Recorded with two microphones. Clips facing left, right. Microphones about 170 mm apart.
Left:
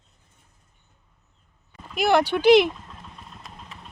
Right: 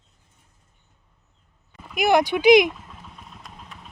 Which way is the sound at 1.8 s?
10° right (ahead or behind).